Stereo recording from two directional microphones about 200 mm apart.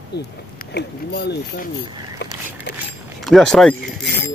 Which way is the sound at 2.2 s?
60° left (ahead or behind).